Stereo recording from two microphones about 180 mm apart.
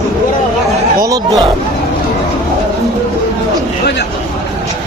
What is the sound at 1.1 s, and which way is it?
Speech, 20° right (ahead or behind).